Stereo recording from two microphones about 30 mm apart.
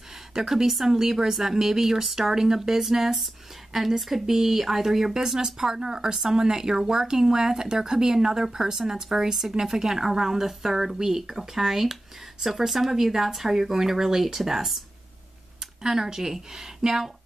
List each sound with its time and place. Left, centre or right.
0.3 s speech: centre
15.8 s speech: centre